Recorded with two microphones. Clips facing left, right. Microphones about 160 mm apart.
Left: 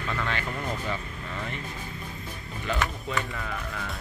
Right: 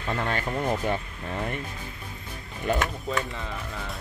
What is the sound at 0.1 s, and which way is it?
Speech, 40° right (ahead or behind).